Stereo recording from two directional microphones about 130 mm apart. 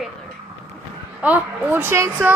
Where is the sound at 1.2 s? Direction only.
10° right (ahead or behind).